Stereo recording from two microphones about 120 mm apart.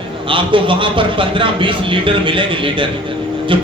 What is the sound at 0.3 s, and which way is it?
A man's voice, 45° right (ahead or behind).